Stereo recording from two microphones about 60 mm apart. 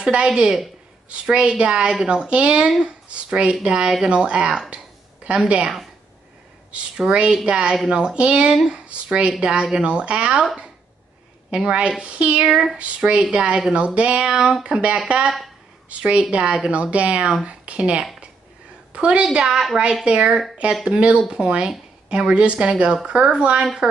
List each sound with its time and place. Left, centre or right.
0.0 s speech: centre
6.7 s speech: centre
11.5 s speech: centre
12.4 s speech: centre
12.7 s speech: centre
15.2 s speech: centre
15.9 s speech: centre